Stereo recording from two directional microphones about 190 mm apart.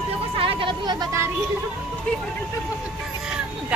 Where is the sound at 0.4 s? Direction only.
25° right (ahead or behind).